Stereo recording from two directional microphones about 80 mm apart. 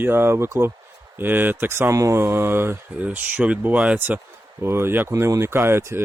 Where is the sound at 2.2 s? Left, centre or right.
Right.